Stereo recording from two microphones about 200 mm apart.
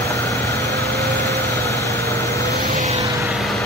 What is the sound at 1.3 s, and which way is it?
Vehicle, 55° right (ahead or behind).